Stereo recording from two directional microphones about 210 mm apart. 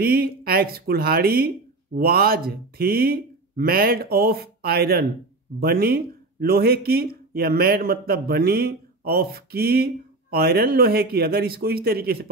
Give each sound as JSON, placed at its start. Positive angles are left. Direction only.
{"t": 0.0, "sound": "speech", "side_deg": -45}